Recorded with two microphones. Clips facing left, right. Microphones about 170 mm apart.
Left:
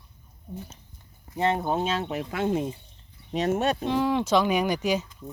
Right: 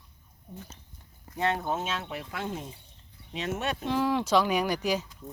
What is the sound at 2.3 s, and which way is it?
Speech, 60° left (ahead or behind).